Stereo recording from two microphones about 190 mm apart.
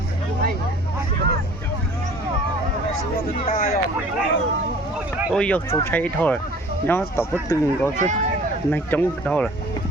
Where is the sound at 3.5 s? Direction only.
50° left (ahead or behind).